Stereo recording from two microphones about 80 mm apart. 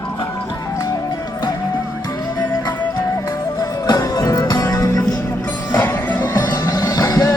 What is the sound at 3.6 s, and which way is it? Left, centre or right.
Music, left.